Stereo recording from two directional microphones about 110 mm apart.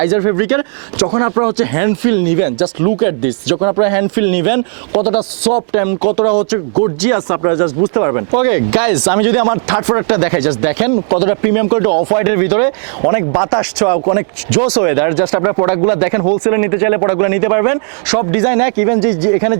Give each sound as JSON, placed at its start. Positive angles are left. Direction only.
{"t": 0.0, "sound": "speech", "side_deg": -20}